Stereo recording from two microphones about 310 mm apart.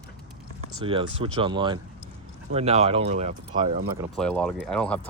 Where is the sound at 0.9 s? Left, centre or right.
Centre.